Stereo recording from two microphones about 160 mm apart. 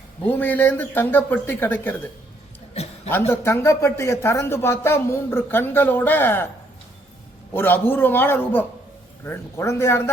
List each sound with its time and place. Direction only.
0.3 s speech: 10° left (ahead or behind)
3.1 s speech: 15° left (ahead or behind)
7.5 s speech: 15° left (ahead or behind)